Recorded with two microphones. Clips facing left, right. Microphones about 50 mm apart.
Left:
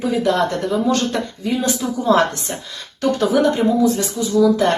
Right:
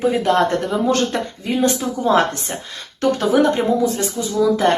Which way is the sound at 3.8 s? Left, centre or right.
Right.